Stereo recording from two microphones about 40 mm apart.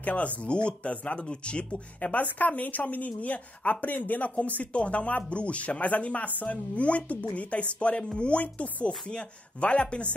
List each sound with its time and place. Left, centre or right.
0.0 s speech: left
2.0 s speech: left
9.0 s speech: left